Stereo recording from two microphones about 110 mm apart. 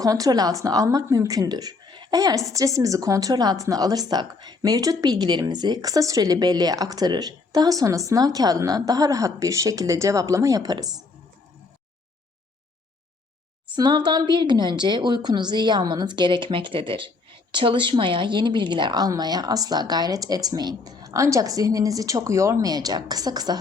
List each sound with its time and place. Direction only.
0.0 s a woman's voice: 35° right (ahead or behind)
13.7 s a woman's voice: 40° right (ahead or behind)